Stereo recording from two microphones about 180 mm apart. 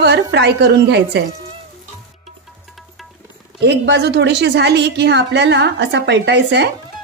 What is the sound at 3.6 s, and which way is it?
A woman's voice, 70° right (ahead or behind).